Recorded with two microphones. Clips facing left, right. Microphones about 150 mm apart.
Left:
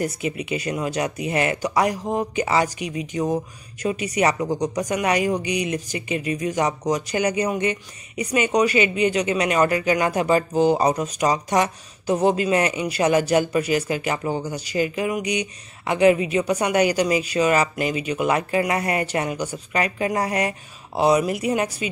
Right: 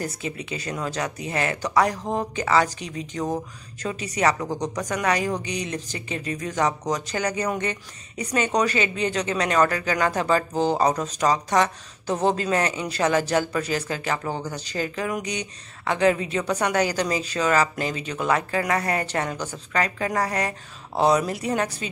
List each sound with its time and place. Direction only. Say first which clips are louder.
0.0 s speech: left 5 dB; 15° left (ahead or behind)